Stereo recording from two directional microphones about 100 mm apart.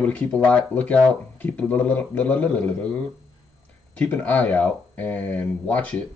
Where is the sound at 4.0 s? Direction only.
15° left (ahead or behind).